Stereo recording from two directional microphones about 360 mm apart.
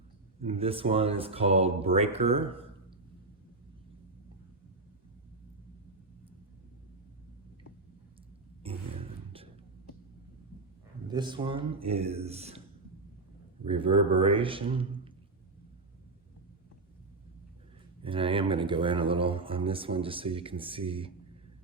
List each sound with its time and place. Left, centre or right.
0.3 s speech: centre
8.6 s a sound: centre
11.1 s speech: centre
13.7 s speech: centre
18.0 s speech: centre